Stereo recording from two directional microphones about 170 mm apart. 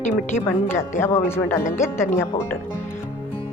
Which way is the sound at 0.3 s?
15° left (ahead or behind).